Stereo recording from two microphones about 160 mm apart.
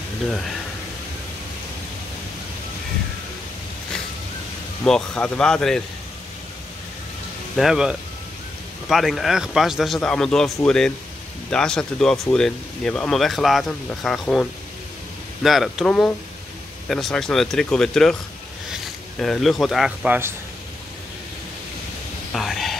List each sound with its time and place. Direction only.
4.8 s speech: 5° left (ahead or behind)
7.5 s speech: 5° right (ahead or behind)
22.3 s a sound: centre (ahead or behind)